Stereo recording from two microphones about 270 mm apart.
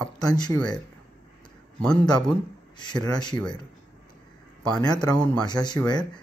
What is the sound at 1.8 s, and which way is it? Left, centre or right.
Speech, centre.